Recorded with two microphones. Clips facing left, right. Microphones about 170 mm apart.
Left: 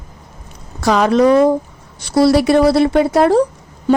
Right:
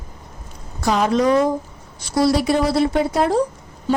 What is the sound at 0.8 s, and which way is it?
A woman's voice, 80° left.